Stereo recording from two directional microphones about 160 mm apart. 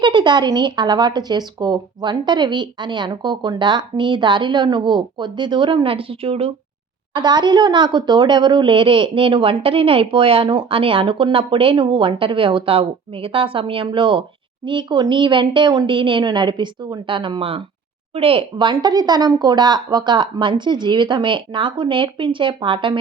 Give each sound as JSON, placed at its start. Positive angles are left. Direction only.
{"t": 0.0, "sound": "speech", "side_deg": -30}
{"t": 7.1, "sound": "a woman's voice", "side_deg": -30}